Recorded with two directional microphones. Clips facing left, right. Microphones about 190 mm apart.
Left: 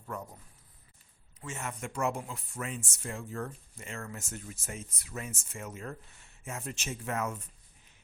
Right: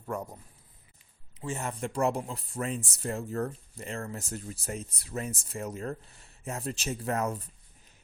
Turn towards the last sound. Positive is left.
turn(degrees=-35)  # may be behind; listen again after turning